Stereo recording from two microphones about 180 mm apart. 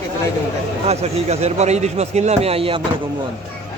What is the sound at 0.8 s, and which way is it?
A man's voice, 35° right (ahead or behind).